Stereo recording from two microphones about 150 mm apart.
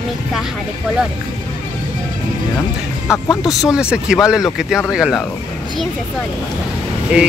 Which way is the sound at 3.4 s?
5° right (ahead or behind).